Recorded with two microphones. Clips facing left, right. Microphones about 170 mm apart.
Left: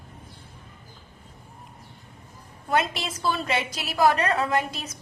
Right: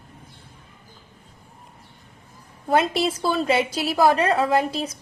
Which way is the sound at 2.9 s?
35° right (ahead or behind).